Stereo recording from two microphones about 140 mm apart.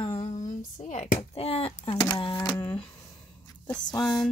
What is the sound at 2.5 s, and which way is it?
Speech, 10° left (ahead or behind).